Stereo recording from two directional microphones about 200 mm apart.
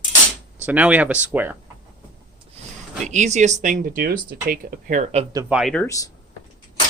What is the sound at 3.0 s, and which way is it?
Speech, 35° right (ahead or behind).